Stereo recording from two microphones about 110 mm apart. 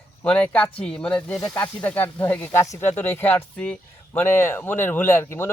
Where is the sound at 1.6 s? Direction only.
15° left (ahead or behind).